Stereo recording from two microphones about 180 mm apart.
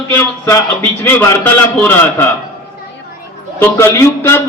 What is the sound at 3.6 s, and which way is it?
Speech, 10° left (ahead or behind).